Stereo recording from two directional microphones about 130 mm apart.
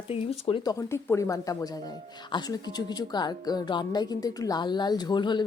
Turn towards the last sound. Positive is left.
turn(degrees=35)  # may be behind; listen again after turning